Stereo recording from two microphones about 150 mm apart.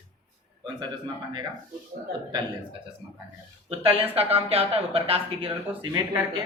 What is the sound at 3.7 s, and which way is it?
Speech, 40° right (ahead or behind).